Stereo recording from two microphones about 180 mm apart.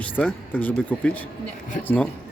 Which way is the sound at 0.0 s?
10° left (ahead or behind).